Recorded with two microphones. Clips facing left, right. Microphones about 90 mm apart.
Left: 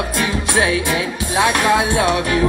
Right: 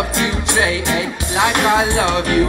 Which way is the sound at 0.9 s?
25° right (ahead or behind).